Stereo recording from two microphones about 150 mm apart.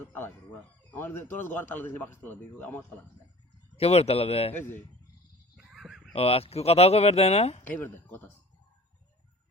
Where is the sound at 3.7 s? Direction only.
45° left (ahead or behind).